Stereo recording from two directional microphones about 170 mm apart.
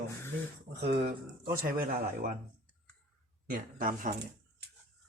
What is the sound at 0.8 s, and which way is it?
Speech, 70° right (ahead or behind).